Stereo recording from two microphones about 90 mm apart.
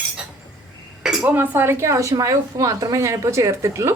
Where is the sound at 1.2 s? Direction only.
20° right (ahead or behind).